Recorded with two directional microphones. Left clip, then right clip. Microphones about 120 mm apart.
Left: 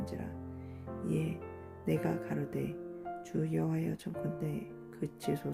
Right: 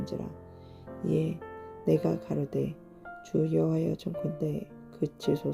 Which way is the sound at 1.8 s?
25° right (ahead or behind).